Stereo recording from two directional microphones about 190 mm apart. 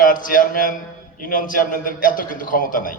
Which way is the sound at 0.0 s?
45° left (ahead or behind).